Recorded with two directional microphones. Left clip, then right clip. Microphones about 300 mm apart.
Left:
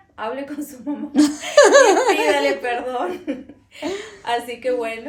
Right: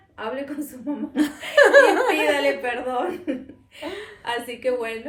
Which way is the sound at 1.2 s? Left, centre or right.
Centre.